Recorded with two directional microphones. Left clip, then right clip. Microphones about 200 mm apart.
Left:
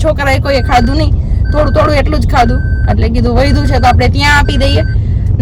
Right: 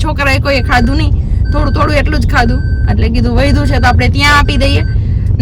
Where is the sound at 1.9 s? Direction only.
5° right (ahead or behind).